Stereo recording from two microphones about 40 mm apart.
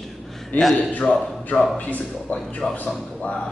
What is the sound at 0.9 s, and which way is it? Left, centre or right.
Speech, left.